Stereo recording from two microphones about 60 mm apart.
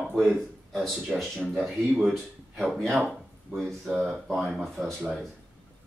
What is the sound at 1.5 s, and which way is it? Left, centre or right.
Speech, centre.